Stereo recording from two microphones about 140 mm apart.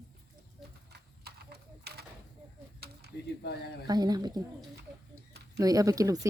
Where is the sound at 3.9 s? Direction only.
30° right (ahead or behind).